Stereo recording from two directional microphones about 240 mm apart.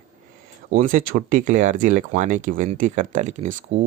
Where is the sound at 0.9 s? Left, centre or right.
Right.